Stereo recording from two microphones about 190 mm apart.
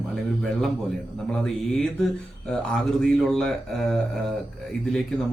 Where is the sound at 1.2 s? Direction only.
5° left (ahead or behind).